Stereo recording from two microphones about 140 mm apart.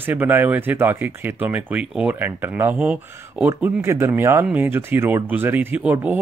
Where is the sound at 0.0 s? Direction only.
15° right (ahead or behind).